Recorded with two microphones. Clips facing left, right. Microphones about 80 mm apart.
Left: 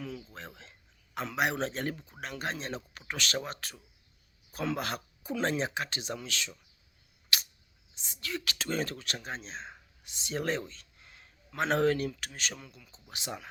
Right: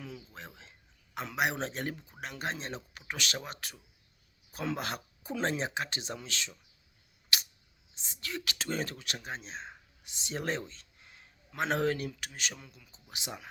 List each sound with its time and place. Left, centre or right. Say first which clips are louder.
0.0 s a sound: left 4 dB; centre
0.3 s a man's voice: left 2 dB; centre
7.3 s camera: left 1 dB; centre
7.9 s speech: left 2 dB; right